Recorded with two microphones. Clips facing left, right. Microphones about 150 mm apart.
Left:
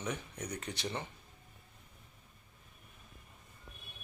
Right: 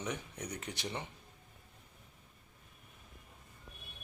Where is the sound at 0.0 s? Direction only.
15° right (ahead or behind).